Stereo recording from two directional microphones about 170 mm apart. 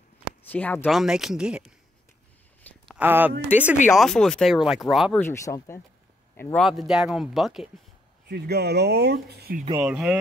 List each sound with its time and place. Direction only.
0.4 s speech: 10° left (ahead or behind)
0.8 s a man's voice: 5° right (ahead or behind)
2.6 s a sound: 10° left (ahead or behind)
3.0 s speech: 10° right (ahead or behind)
3.9 s a man's voice: centre (ahead or behind)
5.2 s a man's voice: 15° left (ahead or behind); by 7.7 s centre (ahead or behind)
8.3 s speech: 70° right (ahead or behind)
9.8 s a man's voice: 5° right (ahead or behind)